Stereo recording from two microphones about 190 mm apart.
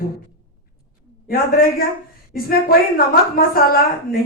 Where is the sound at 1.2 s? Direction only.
50° left (ahead or behind).